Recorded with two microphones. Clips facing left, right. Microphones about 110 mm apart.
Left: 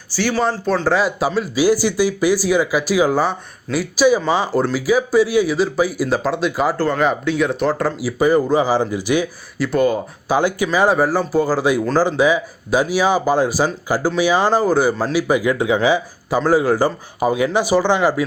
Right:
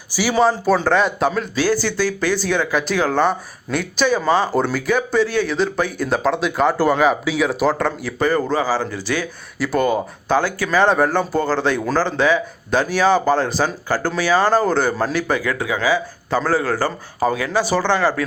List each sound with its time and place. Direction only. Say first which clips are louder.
0.1 s speech: right 2 dB; 10° right (ahead or behind)
6.7 s speech: right 2 dB; 10° right (ahead or behind); by 9.2 s 15° left (ahead or behind)
9.6 s speech: left 1 dB; centre (ahead or behind)
10.3 s speech: left 1 dB; 15° left (ahead or behind)
15.3 s speech: left 4 dB; 15° left (ahead or behind)